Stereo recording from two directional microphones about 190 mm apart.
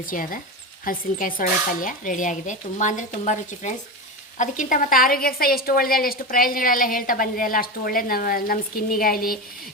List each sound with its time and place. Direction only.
0.0 s a woman's voice: 45° left (ahead or behind)